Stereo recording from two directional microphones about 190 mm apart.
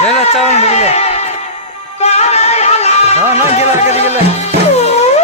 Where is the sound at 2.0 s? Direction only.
35° left (ahead or behind).